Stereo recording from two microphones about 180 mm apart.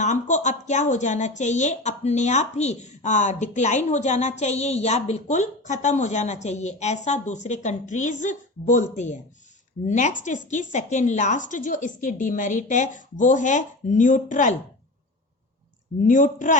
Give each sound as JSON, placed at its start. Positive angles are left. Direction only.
{"t": 0.0, "sound": "a woman's voice", "side_deg": 40}
{"t": 16.0, "sound": "a woman's voice", "side_deg": 45}